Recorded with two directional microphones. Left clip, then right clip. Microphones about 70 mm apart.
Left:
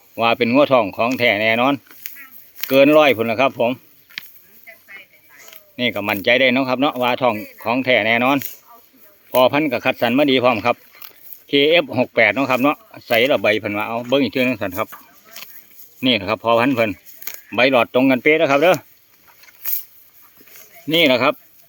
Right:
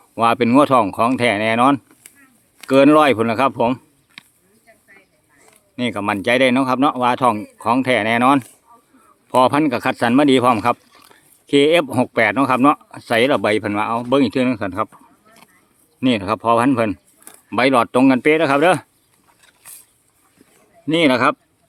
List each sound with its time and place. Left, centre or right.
0.2 s speech: right
3.0 s speech: right
4.7 s a sound: right
5.4 s speech: centre; by 8.4 s right
9.4 s speech: right
11.1 s a sound: right
12.1 s speech: right
14.4 s speech: centre
15.4 s a sound: left
16.0 s speech: centre
17.5 s speech: right
20.5 s a sound: centre
21.0 s speech: centre